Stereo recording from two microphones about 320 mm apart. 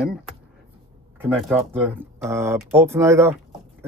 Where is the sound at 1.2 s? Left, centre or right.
Centre.